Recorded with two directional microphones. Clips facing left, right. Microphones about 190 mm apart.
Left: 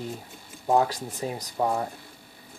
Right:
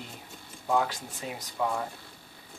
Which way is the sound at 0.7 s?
40° left (ahead or behind).